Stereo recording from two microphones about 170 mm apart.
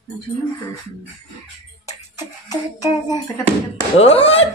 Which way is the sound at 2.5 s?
20° left (ahead or behind).